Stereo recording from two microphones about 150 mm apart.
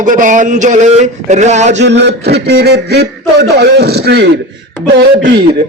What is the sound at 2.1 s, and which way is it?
A man's voice, 90° right.